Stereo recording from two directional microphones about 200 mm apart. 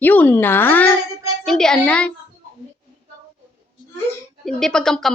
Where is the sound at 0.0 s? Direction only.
10° left (ahead or behind).